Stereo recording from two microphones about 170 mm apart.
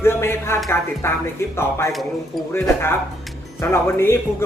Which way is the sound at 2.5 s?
15° left (ahead or behind).